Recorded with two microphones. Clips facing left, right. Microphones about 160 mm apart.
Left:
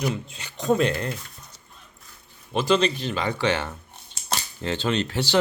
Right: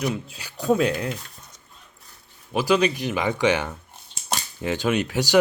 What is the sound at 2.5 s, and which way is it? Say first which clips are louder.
Speech: right 1 dB; 10° right (ahead or behind).